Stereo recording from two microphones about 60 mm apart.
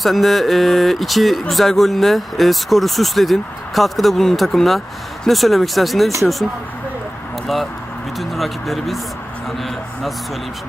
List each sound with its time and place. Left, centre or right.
0.0 s speech: centre
7.4 s speech: centre